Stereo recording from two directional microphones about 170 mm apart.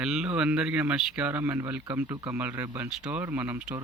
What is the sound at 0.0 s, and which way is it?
Speech, 5° right (ahead or behind).